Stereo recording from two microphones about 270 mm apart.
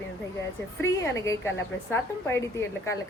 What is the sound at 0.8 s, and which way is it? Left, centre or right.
A woman's voice, centre.